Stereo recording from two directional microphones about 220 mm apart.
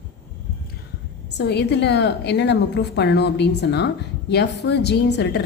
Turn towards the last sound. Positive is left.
turn(degrees=50)  # may be behind; listen again after turning